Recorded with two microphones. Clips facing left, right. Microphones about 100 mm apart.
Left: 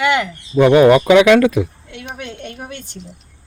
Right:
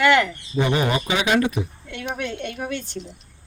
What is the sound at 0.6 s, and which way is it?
Speech, 80° left.